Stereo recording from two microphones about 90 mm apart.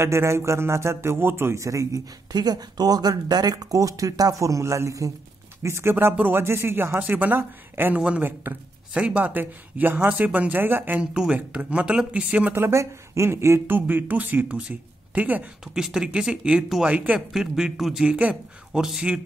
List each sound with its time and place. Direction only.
0.0 s speech: 30° right (ahead or behind)
8.0 s speech: 10° right (ahead or behind)
12.5 s speech: 30° right (ahead or behind)
15.6 s speech: 5° right (ahead or behind)
17.3 s speech: 5° right (ahead or behind)